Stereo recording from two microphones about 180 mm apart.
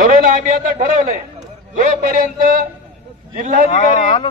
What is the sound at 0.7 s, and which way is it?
Speech, 50° right (ahead or behind).